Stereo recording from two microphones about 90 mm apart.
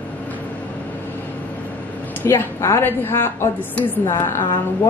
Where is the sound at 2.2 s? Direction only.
30° left (ahead or behind).